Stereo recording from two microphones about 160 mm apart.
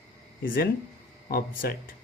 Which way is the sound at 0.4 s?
65° left (ahead or behind).